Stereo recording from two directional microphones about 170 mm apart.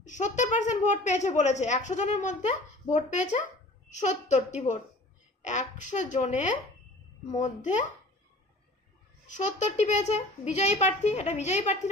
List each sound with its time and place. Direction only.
0.0 s a woman's voice: 45° left (ahead or behind)
9.3 s speech: 45° left (ahead or behind)